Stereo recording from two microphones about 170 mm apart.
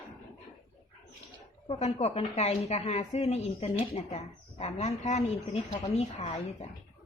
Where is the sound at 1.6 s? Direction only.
40° left (ahead or behind).